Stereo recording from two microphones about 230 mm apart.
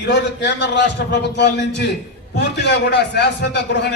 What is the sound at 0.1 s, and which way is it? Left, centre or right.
A man's voice, left.